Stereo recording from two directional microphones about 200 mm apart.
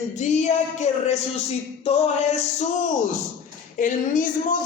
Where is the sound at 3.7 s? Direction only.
40° left (ahead or behind).